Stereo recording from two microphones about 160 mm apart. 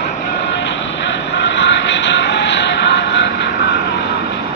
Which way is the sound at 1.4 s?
90° left.